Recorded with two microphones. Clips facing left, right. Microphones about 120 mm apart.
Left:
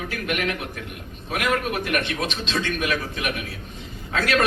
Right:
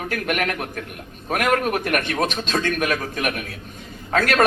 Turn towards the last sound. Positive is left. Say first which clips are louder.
# right 3 dB
turn(degrees=-45)  # may be behind; listen again after turning